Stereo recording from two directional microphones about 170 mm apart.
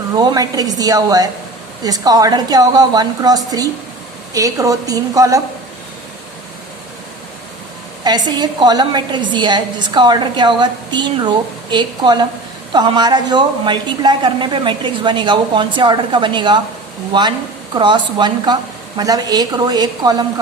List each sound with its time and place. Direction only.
0.2 s a woman's voice: 25° right (ahead or behind)
8.0 s a woman's voice: 25° right (ahead or behind)